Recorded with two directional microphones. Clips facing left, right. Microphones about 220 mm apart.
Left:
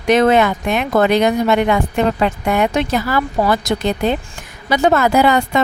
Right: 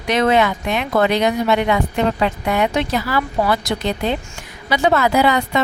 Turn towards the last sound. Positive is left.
turn(degrees=45)  # may be behind; listen again after turning